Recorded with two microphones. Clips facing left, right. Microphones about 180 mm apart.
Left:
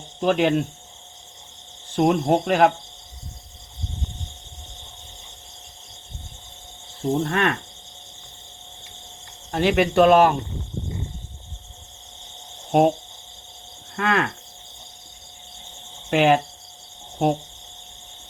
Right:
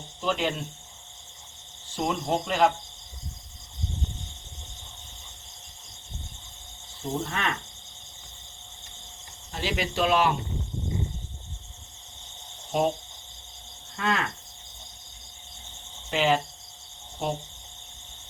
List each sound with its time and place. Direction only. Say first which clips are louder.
0.2 s speech: left 9 dB; 60° left (ahead or behind)
2.0 s speech: left 9 dB; 55° left (ahead or behind)
7.2 s speech: left 8 dB; 60° left (ahead or behind)
9.5 s speech: left 11 dB; 60° left (ahead or behind)
12.7 s speech: left 8 dB; 60° left (ahead or behind)
13.9 s cricket: left 5 dB; 60° left (ahead or behind)
16.0 s cricket: left 7 dB; 55° left (ahead or behind)
17.2 s speech: left 9 dB; 55° left (ahead or behind)